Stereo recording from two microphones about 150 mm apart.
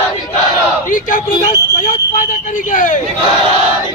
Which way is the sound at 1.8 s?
60° left (ahead or behind).